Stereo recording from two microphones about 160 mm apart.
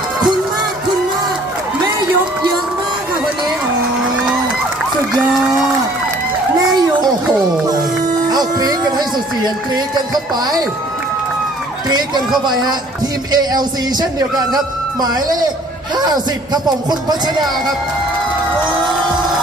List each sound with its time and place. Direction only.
8.3 s music: 25° right (ahead or behind)
11.9 s speech: 25° right (ahead or behind)
13.3 s speech: 25° right (ahead or behind)
16.0 s speech: 25° right (ahead or behind)